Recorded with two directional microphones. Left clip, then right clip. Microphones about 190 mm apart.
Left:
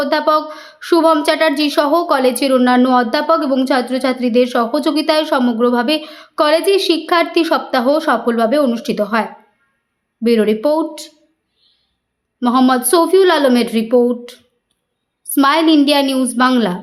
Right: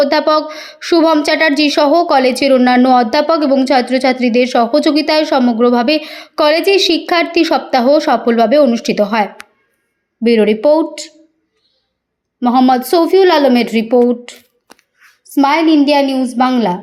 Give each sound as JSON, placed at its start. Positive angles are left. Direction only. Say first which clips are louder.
{"t": 0.0, "sound": "a woman's voice", "louder": "right 3 dB", "side_deg": -15}
{"t": 12.4, "sound": "a woman's voice", "louder": "right 3 dB", "side_deg": -10}
{"t": 15.4, "sound": "a woman's voice", "louder": "right 1 dB", "side_deg": -5}